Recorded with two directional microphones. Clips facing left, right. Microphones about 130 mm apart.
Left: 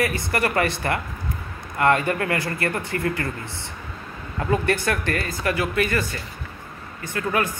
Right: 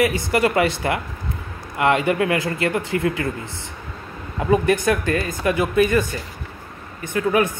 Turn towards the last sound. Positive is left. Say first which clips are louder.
# right 5 dB
turn(degrees=-20)  # may be behind; listen again after turning